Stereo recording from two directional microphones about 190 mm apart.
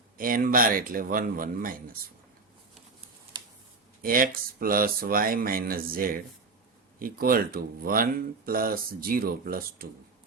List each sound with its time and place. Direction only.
0.2 s speech: 45° right (ahead or behind)
4.0 s speech: 50° right (ahead or behind)